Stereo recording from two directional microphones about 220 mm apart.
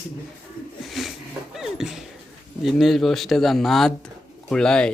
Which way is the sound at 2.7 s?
Centre (ahead or behind).